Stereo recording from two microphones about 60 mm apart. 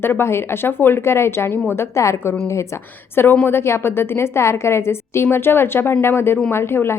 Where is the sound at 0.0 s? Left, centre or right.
Left.